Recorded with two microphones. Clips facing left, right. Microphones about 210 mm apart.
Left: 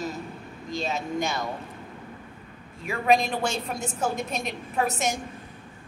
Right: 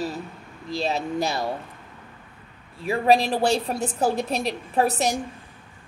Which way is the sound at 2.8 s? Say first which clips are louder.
Right 3 dB; 35° right (ahead or behind).